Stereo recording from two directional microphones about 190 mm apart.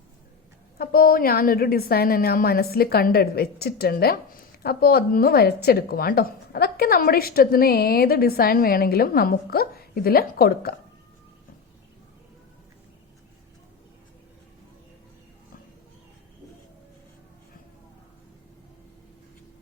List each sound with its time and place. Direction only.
0.8 s a woman's voice: 50° left (ahead or behind)